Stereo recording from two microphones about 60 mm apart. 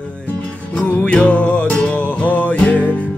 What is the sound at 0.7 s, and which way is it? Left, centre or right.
Music, centre.